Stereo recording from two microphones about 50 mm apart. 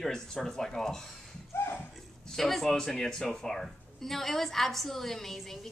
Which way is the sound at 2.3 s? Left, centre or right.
Centre.